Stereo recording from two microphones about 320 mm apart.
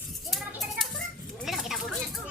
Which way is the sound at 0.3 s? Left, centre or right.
Centre.